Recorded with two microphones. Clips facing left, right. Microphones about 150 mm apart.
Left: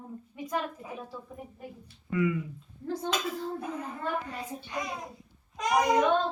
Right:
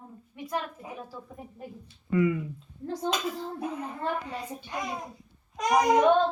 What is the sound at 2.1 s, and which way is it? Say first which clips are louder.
Speech: right 3 dB; 25° right (ahead or behind).